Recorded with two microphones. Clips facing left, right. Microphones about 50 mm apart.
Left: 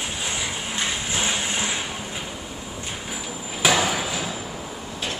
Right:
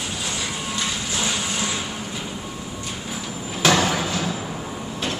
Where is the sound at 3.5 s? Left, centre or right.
Centre.